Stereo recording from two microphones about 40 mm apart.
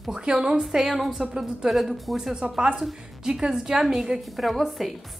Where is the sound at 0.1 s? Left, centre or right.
Centre.